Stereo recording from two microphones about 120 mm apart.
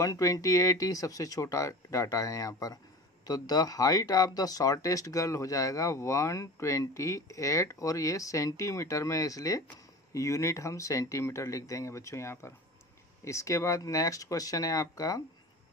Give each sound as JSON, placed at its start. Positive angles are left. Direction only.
{"t": 0.0, "sound": "speech", "side_deg": 30}